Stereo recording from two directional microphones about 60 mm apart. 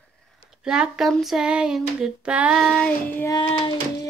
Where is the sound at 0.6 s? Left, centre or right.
Centre.